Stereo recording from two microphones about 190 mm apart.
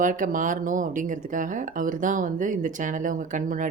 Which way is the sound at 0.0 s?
45° right (ahead or behind).